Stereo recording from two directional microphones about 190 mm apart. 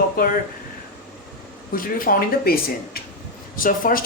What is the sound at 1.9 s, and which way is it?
Speech, 50° left (ahead or behind).